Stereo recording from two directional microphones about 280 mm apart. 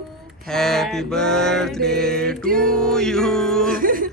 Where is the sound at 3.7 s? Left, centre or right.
Right.